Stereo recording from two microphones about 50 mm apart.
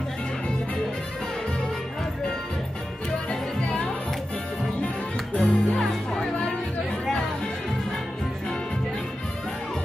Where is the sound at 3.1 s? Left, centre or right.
Centre.